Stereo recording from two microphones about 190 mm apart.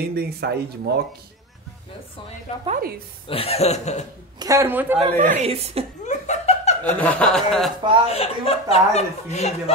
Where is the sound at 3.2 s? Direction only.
30° left (ahead or behind).